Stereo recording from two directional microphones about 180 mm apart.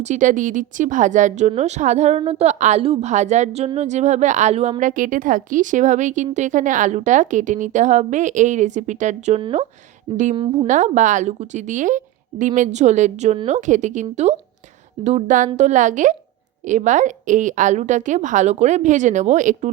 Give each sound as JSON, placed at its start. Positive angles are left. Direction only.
{"t": 0.0, "sound": "a woman's voice", "side_deg": -40}
{"t": 10.7, "sound": "a woman's voice", "side_deg": -45}